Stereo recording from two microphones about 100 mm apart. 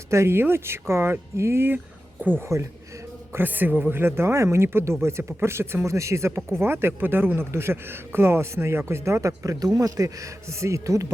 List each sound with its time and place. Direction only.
0.1 s speech: 25° right (ahead or behind)